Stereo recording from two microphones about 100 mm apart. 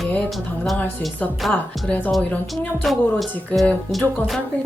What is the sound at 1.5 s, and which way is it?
Speech, 15° left (ahead or behind).